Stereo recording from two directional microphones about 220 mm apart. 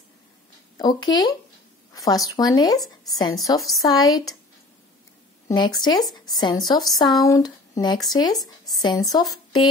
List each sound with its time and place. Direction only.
0.7 s speech: 20° left (ahead or behind)
5.5 s speech: 20° left (ahead or behind)
8.4 s speech: centre (ahead or behind)
8.8 s speech: 20° left (ahead or behind)